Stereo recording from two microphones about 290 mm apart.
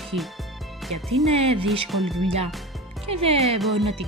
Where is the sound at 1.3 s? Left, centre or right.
Right.